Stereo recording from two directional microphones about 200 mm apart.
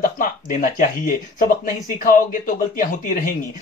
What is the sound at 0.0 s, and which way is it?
Speech, 40° left (ahead or behind).